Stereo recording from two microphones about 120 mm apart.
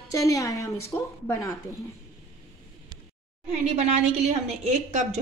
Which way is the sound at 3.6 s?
65° right (ahead or behind).